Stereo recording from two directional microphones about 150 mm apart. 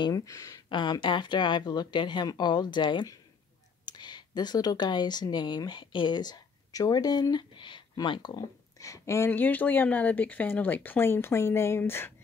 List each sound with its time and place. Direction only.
0.0 s speech: 20° left (ahead or behind)